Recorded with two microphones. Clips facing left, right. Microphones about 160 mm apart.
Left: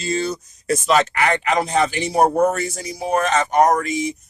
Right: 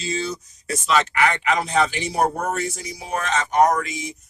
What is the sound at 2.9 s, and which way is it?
Speech, 55° left (ahead or behind).